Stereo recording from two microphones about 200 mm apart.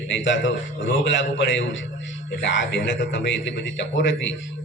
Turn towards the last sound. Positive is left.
turn(degrees=65)  # may be behind; listen again after turning